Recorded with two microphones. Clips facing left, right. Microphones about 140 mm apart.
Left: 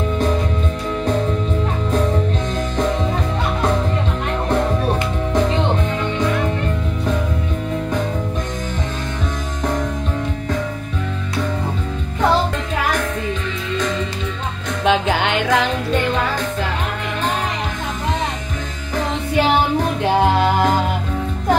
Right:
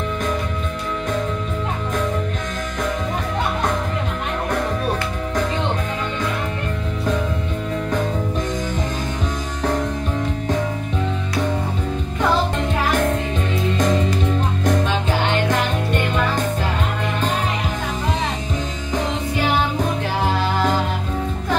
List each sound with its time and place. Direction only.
13.7 s music: 45° right (ahead or behind)
14.9 s music: 90° left